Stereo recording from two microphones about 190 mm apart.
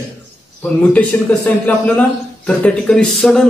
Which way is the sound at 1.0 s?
10° left (ahead or behind).